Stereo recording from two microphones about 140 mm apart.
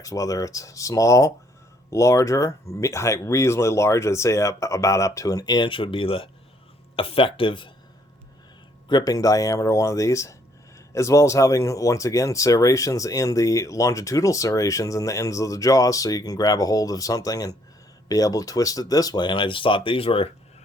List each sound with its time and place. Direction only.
0.0 s speech: 25° left (ahead or behind)
8.9 s speech: 30° left (ahead or behind)